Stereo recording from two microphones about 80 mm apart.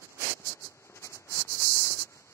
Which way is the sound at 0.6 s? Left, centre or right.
Left.